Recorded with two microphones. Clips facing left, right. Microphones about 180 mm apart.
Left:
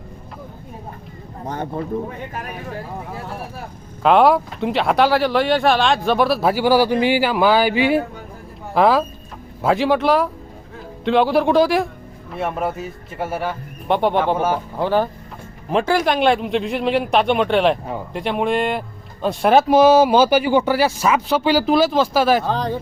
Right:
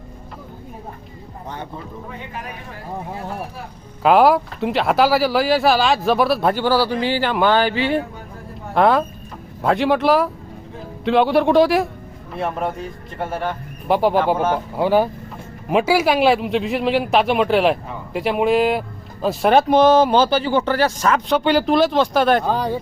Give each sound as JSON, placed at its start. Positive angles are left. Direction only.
{"t": 1.5, "sound": "speech", "side_deg": 45}
{"t": 4.0, "sound": "speech", "side_deg": 0}
{"t": 8.7, "sound": "speech", "side_deg": 0}
{"t": 22.4, "sound": "speech", "side_deg": -10}